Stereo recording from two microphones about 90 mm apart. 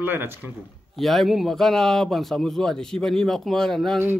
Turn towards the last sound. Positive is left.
turn(degrees=5)  # may be behind; listen again after turning